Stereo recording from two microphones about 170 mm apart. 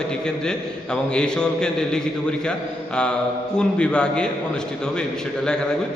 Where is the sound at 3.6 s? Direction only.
5° left (ahead or behind).